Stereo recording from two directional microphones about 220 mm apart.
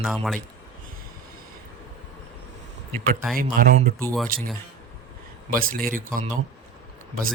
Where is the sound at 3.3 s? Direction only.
40° right (ahead or behind).